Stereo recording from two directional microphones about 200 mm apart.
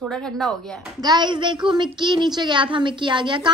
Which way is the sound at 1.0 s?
20° right (ahead or behind).